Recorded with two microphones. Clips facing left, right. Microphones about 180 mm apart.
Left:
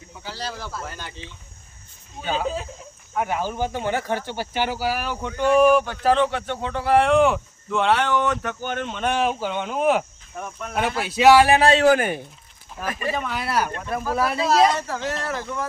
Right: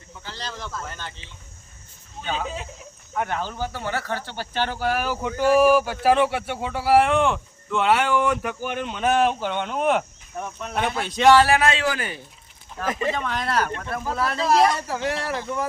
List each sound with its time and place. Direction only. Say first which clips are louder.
0.3 s speech: left 2 dB; 10° left (ahead or behind)
3.2 s speech: left 3 dB; 10° left (ahead or behind)
11.6 s speech: left 7 dB; 45° left (ahead or behind)
12.9 s speech: right 3 dB; 20° right (ahead or behind)
13.1 s speech: even; 10° left (ahead or behind)
14.8 s speech: right 1 dB; 10° right (ahead or behind)